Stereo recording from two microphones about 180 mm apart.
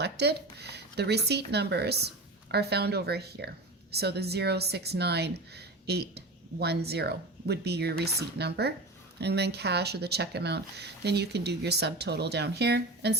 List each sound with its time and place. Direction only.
0.0 s speech: 65° right (ahead or behind)